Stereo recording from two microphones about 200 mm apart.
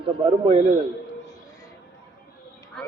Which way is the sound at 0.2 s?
30° right (ahead or behind).